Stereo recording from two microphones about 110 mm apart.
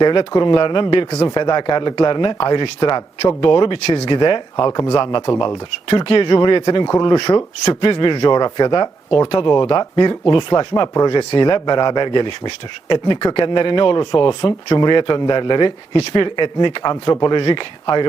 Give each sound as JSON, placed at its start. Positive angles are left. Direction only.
{"t": 0.0, "sound": "a man's voice", "side_deg": 45}
{"t": 3.8, "sound": "speech", "side_deg": 80}
{"t": 4.1, "sound": "a man's voice", "side_deg": 45}
{"t": 5.9, "sound": "a man's voice", "side_deg": 55}
{"t": 17.4, "sound": "a man's voice", "side_deg": 45}